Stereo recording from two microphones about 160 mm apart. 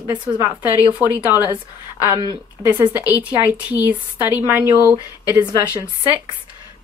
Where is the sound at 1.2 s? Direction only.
15° right (ahead or behind).